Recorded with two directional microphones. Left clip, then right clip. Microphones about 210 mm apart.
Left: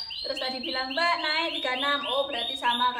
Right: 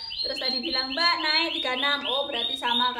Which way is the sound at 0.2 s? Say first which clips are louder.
Right 4 dB; centre (ahead or behind).